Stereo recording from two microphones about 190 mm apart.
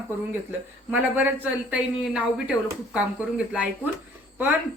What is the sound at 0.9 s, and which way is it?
A woman's voice, 10° right (ahead or behind).